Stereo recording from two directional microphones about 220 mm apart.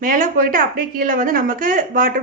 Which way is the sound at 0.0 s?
40° right (ahead or behind).